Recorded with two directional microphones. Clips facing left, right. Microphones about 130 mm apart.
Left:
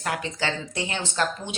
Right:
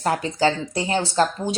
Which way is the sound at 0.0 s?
35° right (ahead or behind).